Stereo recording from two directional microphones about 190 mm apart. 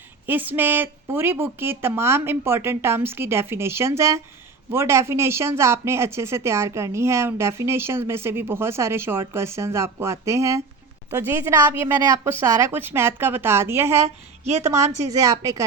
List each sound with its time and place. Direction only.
0.3 s speech: 10° right (ahead or behind)